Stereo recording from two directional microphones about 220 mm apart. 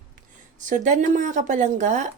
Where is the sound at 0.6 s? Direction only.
35° right (ahead or behind).